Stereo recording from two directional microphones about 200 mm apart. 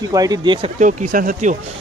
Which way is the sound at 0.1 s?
20° right (ahead or behind).